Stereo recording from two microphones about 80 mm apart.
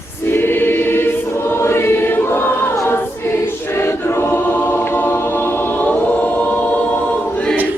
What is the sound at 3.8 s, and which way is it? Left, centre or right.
Choir, left.